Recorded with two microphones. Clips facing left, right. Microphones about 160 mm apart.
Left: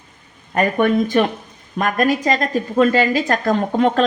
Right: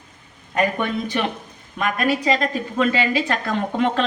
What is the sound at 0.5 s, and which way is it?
A woman's voice, 50° left (ahead or behind).